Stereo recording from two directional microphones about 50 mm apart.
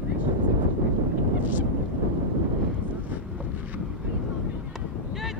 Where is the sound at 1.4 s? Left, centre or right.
Right.